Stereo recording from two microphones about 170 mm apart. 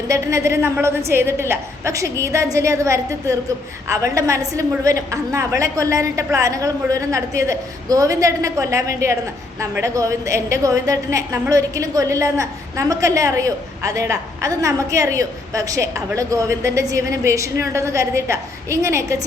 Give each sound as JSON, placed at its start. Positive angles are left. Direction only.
{"t": 0.1, "sound": "a woman's voice", "side_deg": -15}